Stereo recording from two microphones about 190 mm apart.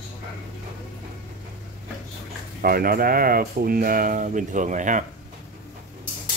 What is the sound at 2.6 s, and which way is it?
Speech, 50° right (ahead or behind).